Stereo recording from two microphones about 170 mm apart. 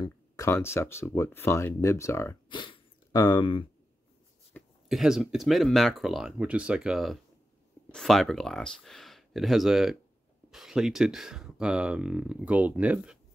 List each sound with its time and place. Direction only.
0.0 s speech: 15° left (ahead or behind)
2.5 s speech: 30° left (ahead or behind)
4.8 s speech: centre (ahead or behind)